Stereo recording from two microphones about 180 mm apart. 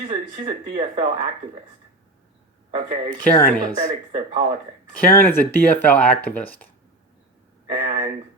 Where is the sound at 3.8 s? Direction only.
40° right (ahead or behind).